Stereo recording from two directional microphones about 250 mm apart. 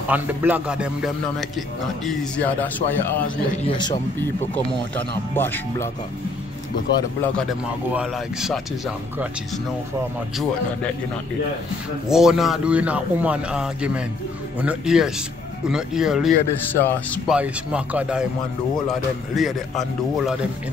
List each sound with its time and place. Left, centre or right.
0.1 s a man's voice: centre
4.6 s speech: centre
7.9 s a man's voice: centre
12.1 s a man's voice: centre
16.7 s speech: centre
17.3 s a man's voice: centre